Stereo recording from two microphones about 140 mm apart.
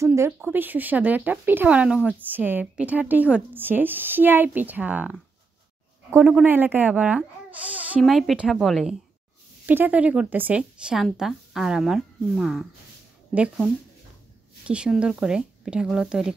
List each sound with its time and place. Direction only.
0.0 s a woman's voice: 20° right (ahead or behind); by 8.9 s centre (ahead or behind)
9.7 s a woman's voice: 10° right (ahead or behind)
14.7 s a woman's voice: 5° right (ahead or behind)